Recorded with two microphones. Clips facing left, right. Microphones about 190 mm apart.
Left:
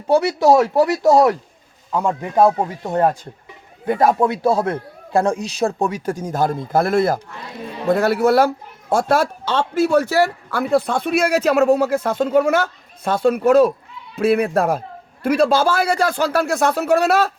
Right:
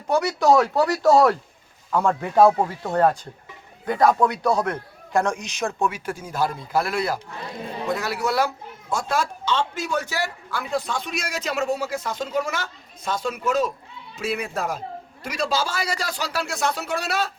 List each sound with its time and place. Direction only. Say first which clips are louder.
0.1 s a man's voice: left 4 dB; 25° left (ahead or behind); by 17.3 s 60° left (ahead or behind)